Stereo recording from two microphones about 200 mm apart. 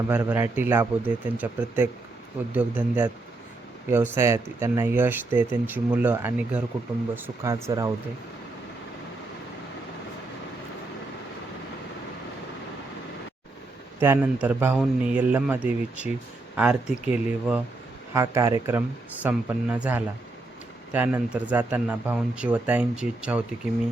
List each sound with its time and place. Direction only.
0.1 s speech: 10° right (ahead or behind)
14.0 s speech: 10° right (ahead or behind)